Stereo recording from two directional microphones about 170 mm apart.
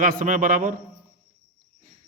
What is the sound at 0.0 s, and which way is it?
Speech, 55° right (ahead or behind).